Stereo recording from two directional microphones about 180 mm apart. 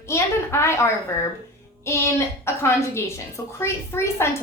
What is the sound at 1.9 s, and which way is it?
A woman's voice, 15° left (ahead or behind).